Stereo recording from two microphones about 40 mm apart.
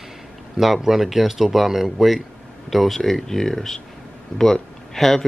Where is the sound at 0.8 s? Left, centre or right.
Centre.